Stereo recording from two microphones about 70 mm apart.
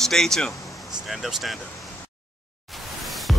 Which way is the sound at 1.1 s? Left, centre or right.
Centre.